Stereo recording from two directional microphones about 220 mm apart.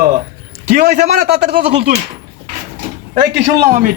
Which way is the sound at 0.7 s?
45° right (ahead or behind).